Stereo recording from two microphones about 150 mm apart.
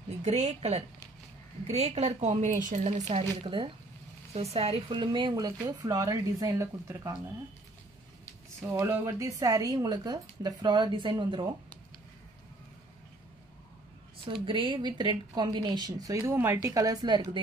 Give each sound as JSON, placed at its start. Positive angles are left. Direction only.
{"t": 0.2, "sound": "a woman's voice", "side_deg": -50}
{"t": 8.7, "sound": "speech", "side_deg": -15}
{"t": 14.2, "sound": "speech", "side_deg": -35}